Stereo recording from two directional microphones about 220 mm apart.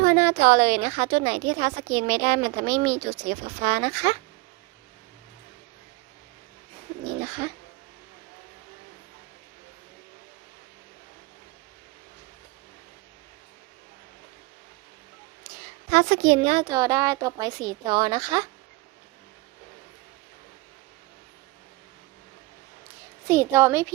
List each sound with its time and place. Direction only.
0.0 s a woman's voice: 30° right (ahead or behind)
15.9 s a woman's voice: 35° right (ahead or behind); by 18.4 s 20° right (ahead or behind)
23.3 s speech: 10° right (ahead or behind)